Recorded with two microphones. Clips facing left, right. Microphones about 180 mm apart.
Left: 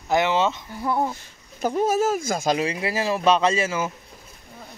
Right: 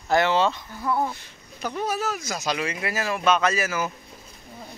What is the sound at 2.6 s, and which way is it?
Speech, 30° left (ahead or behind).